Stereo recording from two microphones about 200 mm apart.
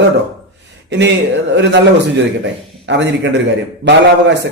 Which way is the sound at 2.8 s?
60° right (ahead or behind).